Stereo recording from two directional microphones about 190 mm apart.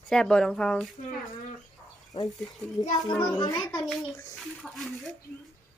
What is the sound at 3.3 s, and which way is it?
Speech, 20° left (ahead or behind).